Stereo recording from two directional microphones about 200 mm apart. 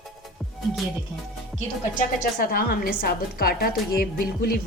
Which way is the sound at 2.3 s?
45° left (ahead or behind).